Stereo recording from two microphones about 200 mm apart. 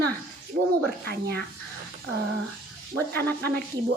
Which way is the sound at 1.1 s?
55° right (ahead or behind).